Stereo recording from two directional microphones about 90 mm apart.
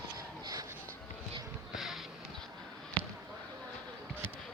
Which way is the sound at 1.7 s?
5° right (ahead or behind).